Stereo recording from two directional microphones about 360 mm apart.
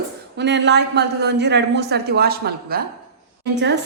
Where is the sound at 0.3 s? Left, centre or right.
Right.